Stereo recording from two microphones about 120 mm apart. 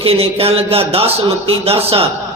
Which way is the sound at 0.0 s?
55° right (ahead or behind).